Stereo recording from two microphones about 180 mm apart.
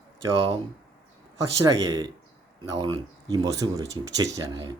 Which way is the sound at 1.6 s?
20° right (ahead or behind).